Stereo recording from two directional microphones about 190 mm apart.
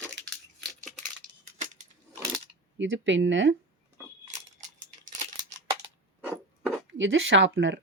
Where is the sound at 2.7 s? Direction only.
85° right.